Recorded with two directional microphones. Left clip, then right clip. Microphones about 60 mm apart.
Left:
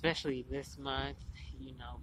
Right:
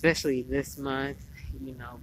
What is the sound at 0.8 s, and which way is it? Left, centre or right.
Speech, centre.